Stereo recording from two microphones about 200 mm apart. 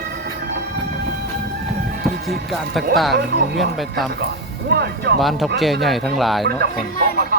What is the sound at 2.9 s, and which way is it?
Speech, centre (ahead or behind).